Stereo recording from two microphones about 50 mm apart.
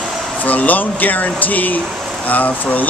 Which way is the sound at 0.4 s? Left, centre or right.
Left.